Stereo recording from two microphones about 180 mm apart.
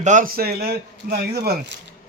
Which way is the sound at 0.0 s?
45° right (ahead or behind).